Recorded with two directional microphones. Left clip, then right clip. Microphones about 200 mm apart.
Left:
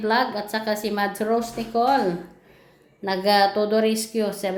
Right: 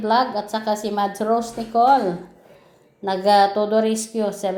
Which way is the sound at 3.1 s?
Centre (ahead or behind).